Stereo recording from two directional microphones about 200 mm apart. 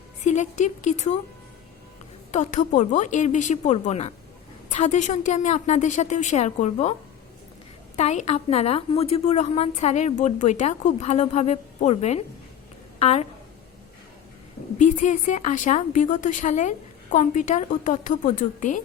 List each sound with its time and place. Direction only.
0.3 s a woman's voice: 35° left (ahead or behind)
2.3 s a woman's voice: 35° left (ahead or behind)
7.9 s a woman's voice: 35° left (ahead or behind)
14.8 s a woman's voice: 40° left (ahead or behind)